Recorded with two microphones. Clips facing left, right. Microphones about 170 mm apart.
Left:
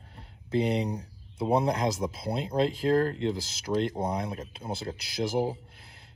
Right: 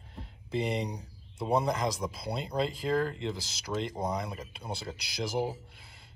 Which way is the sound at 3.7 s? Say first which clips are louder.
Left 6 dB; 25° left (ahead or behind).